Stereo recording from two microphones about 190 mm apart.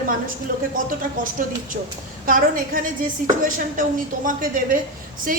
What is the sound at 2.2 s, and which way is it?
Speech, 45° right (ahead or behind).